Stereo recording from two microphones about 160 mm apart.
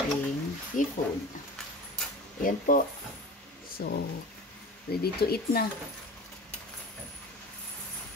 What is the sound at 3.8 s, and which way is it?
Speech, 90° left.